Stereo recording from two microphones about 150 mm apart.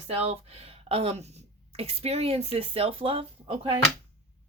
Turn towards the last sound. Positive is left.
turn(degrees=-40)  # may be behind; listen again after turning